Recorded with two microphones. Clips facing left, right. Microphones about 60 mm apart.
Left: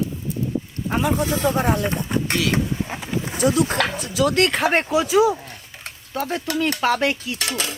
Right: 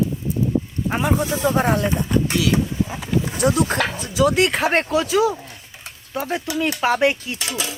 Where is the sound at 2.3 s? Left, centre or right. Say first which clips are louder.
Right 1 dB; left.